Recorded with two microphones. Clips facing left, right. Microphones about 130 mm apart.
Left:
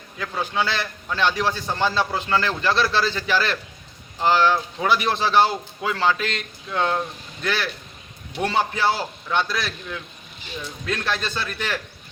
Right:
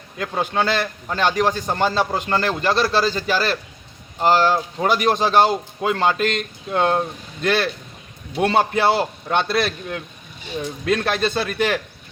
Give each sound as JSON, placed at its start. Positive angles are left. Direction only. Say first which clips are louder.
{"t": 0.2, "sound": "a man's voice", "louder": "right 3 dB", "side_deg": -50}